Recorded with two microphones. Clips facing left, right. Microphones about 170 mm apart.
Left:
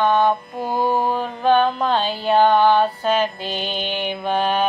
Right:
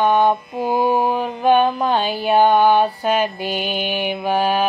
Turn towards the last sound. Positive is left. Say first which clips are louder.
# right 2 dB
turn(degrees=-5)  # may be behind; listen again after turning